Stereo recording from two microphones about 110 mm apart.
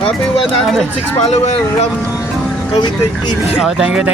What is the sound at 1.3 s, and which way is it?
Speech, 85° left.